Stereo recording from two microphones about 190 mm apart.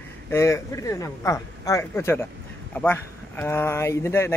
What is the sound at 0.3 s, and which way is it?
Speech, 15° left (ahead or behind).